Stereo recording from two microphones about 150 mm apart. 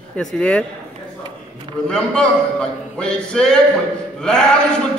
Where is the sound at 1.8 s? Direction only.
5° left (ahead or behind).